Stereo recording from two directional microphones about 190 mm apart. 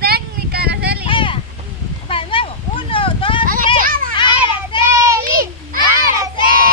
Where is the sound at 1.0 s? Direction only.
25° left (ahead or behind).